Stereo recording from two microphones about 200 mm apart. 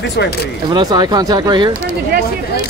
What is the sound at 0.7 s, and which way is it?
Speech, 20° right (ahead or behind).